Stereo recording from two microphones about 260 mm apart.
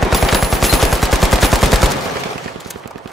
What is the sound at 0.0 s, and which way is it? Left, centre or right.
Machine gun, centre.